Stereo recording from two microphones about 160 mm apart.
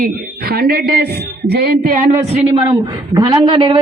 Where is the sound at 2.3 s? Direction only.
40° right (ahead or behind).